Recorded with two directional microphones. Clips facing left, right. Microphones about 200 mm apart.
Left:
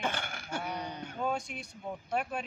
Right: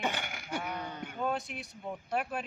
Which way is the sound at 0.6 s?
15° left (ahead or behind).